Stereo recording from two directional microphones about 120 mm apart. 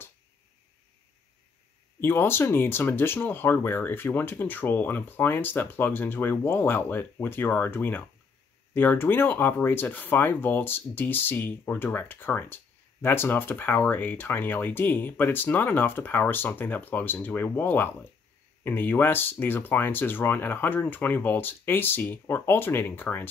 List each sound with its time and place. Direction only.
2.0 s speech: 20° left (ahead or behind)